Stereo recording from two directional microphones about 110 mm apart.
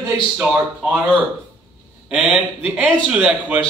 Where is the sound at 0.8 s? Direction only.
10° right (ahead or behind).